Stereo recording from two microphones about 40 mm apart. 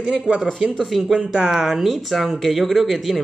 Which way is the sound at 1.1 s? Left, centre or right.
Right.